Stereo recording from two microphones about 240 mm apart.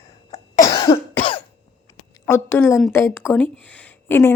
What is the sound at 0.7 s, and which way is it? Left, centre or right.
Cough, centre.